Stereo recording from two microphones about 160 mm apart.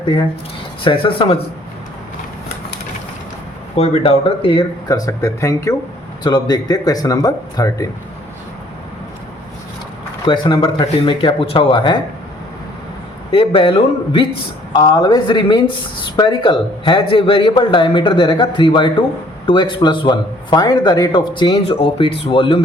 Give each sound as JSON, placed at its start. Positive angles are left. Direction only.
{"t": 0.0, "sound": "speech", "side_deg": 30}
{"t": 3.8, "sound": "a man's voice", "side_deg": 40}
{"t": 10.2, "sound": "speech", "side_deg": 30}
{"t": 13.3, "sound": "a man's voice", "side_deg": 35}